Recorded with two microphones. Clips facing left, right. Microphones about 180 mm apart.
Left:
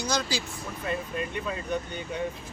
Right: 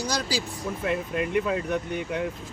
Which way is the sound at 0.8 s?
70° right (ahead or behind).